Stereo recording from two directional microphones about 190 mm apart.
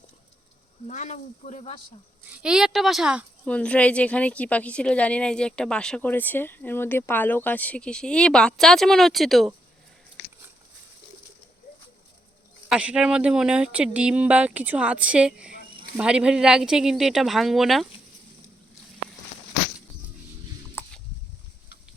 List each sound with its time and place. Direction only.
0.9 s speech: 40° left (ahead or behind)
2.4 s a woman's voice: 5° right (ahead or behind)
3.4 s a woman's voice: 5° left (ahead or behind)
12.6 s a woman's voice: 5° right (ahead or behind)
20.8 s a sound: 15° left (ahead or behind)